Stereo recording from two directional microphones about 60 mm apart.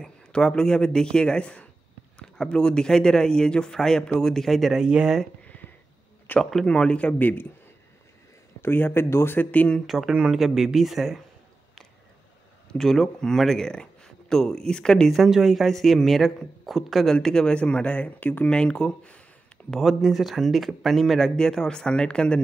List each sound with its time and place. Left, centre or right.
0.0 s a man's voice: centre
4.8 s speech: centre
6.5 s speech: centre; by 7.4 s left
8.5 s speech: left
9.8 s speech: centre
12.6 s speech: centre
15.1 s speech: centre; by 18.5 s left
18.5 s a man's voice: centre
19.8 s speech: centre
21.4 s a man's voice: centre